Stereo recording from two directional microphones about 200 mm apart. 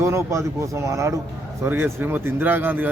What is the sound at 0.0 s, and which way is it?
Speech, 15° right (ahead or behind).